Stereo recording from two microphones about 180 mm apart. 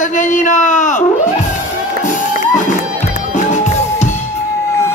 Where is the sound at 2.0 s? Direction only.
45° left (ahead or behind).